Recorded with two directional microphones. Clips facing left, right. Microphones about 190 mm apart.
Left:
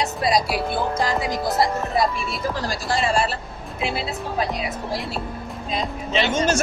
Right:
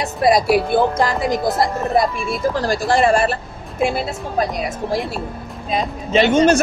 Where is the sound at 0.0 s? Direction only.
50° right (ahead or behind).